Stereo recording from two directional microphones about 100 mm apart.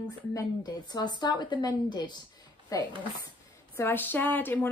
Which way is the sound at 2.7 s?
35° left (ahead or behind).